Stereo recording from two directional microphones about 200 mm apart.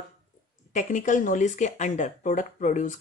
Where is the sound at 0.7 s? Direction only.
40° left (ahead or behind).